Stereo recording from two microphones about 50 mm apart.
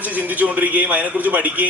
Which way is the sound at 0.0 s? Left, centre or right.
Right.